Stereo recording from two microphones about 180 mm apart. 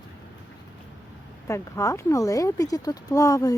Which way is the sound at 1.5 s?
15° left (ahead or behind).